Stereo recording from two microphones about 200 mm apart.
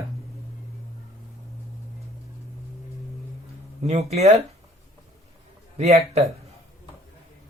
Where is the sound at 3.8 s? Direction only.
30° right (ahead or behind).